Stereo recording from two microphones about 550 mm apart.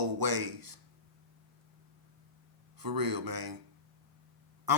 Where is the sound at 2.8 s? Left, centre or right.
Right.